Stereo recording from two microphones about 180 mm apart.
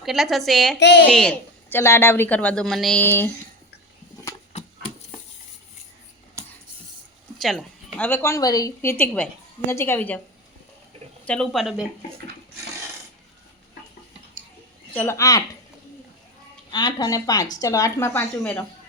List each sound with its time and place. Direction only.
0.0 s a woman's voice: centre (ahead or behind)
0.8 s a woman's voice: 75° left (ahead or behind)
1.1 s speech: 5° left (ahead or behind)
7.3 s speech: centre (ahead or behind)
11.3 s a woman's voice: centre (ahead or behind)
14.9 s speech: 15° left (ahead or behind)
16.7 s a woman's voice: 20° left (ahead or behind)